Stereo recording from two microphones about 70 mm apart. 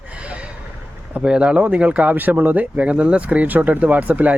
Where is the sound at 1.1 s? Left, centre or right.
Centre.